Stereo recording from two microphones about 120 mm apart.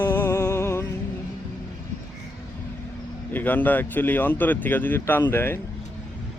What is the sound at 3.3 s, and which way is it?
Speech, 15° left (ahead or behind).